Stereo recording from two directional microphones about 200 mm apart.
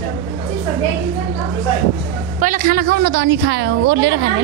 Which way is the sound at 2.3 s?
45° right (ahead or behind).